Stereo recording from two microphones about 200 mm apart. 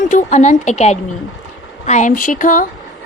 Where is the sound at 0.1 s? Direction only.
40° left (ahead or behind).